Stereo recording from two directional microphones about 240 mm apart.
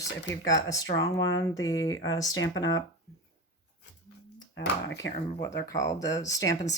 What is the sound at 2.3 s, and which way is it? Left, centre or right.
Speech, left.